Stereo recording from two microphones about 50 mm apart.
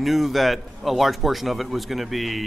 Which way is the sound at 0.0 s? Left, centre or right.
Centre.